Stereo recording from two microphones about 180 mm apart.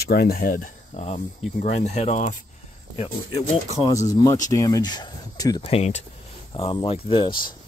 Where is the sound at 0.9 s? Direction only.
35° left (ahead or behind).